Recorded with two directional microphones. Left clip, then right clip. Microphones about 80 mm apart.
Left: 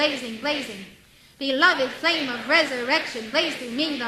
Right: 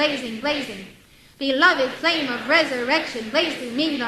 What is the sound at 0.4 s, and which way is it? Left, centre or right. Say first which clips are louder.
A woman's voice: right 2 dB; right.